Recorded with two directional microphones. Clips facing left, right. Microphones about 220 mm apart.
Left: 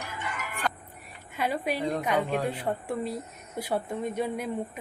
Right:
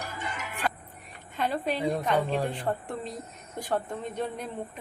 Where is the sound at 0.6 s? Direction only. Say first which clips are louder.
Right 1 dB; 5° right (ahead or behind).